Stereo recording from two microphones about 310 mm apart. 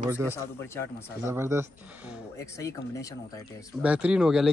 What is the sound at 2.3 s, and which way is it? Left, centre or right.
Speech, centre.